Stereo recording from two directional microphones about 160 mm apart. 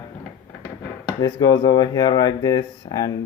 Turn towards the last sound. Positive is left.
turn(degrees=25)  # may be behind; listen again after turning